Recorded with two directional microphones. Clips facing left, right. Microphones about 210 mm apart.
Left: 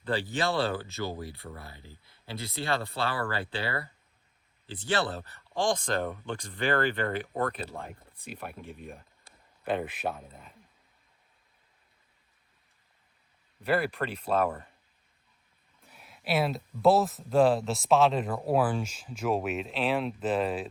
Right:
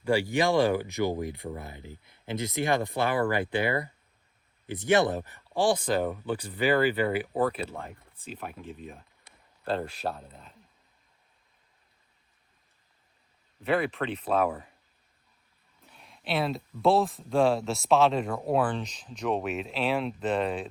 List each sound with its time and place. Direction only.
0.0 s speech: 10° right (ahead or behind)
9.6 s speech: 15° left (ahead or behind)
10.1 s speech: 5° left (ahead or behind)
13.6 s speech: centre (ahead or behind)
15.9 s speech: 5° left (ahead or behind)